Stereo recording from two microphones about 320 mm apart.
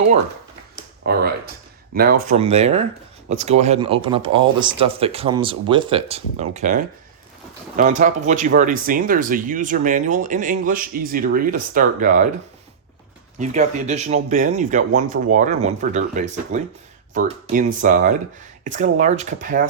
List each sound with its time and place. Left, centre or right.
1.0 s speech: right
2.2 s speech: centre
13.4 s speech: right